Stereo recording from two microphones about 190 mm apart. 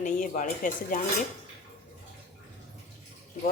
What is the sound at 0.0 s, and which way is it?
Speech, 45° left (ahead or behind).